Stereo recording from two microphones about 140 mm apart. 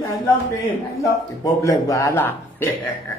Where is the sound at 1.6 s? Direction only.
25° left (ahead or behind).